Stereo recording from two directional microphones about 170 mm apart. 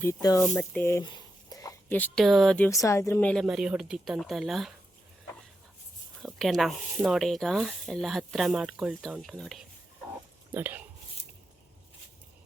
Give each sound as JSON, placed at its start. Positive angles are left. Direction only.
{"t": 0.0, "sound": "speech", "side_deg": 20}
{"t": 1.5, "sound": "a sound", "side_deg": 20}
{"t": 1.9, "sound": "speech", "side_deg": 10}
{"t": 2.6, "sound": "speech", "side_deg": 20}
{"t": 3.4, "sound": "speech", "side_deg": -5}
{"t": 6.2, "sound": "speech", "side_deg": 0}
{"t": 10.5, "sound": "speech", "side_deg": -10}